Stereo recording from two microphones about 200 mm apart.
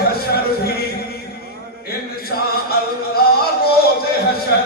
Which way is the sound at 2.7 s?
50° left (ahead or behind).